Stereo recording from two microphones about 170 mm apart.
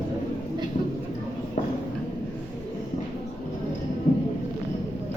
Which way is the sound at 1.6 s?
45° left (ahead or behind).